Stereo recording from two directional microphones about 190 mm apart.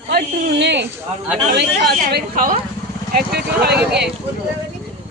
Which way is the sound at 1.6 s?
55° right (ahead or behind).